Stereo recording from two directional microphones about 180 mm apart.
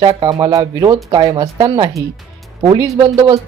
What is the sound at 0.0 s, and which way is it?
Speech, 20° right (ahead or behind).